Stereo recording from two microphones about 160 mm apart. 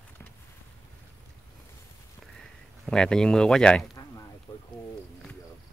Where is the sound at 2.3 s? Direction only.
5° left (ahead or behind).